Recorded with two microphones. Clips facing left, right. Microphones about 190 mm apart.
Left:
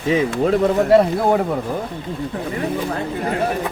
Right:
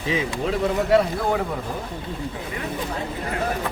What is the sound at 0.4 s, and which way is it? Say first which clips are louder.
Speech: left 6 dB; 45° left (ahead or behind).